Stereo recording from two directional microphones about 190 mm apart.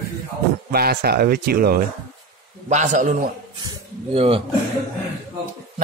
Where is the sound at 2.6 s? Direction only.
40° right (ahead or behind).